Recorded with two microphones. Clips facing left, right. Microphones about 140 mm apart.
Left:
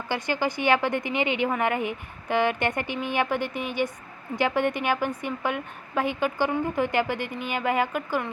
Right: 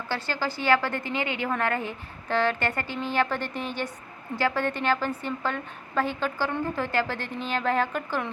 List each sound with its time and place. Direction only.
0.1 s a woman's voice: 15° left (ahead or behind)